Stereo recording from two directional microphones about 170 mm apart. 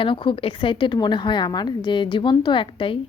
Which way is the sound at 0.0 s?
30° left (ahead or behind).